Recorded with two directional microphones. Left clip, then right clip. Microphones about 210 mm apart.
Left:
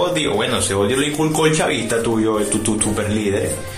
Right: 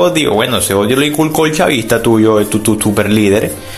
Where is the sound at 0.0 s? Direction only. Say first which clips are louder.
Right 7 dB; 35° right (ahead or behind).